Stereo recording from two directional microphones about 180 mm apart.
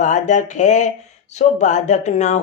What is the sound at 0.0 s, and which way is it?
Speech, 45° left (ahead or behind).